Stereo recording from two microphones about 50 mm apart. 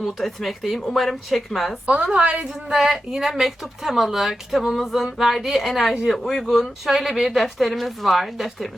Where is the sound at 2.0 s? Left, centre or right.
Centre.